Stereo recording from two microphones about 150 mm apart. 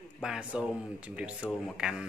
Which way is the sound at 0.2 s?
5° right (ahead or behind).